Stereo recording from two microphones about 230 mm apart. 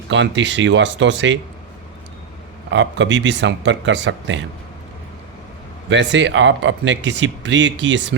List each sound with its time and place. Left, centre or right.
0.1 s speech: right
2.6 s speech: right
5.9 s speech: right